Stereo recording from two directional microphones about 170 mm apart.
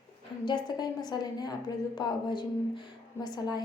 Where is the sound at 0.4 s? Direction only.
25° left (ahead or behind).